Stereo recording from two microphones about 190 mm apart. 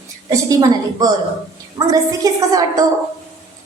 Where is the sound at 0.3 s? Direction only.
20° right (ahead or behind).